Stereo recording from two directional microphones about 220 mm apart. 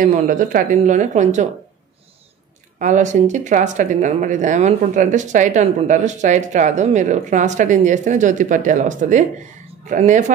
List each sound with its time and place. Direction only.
0.0 s speech: 35° right (ahead or behind)
2.8 s speech: 35° right (ahead or behind)